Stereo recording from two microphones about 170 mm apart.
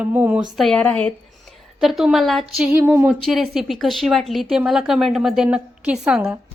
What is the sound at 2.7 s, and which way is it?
A woman's voice, 10° right (ahead or behind).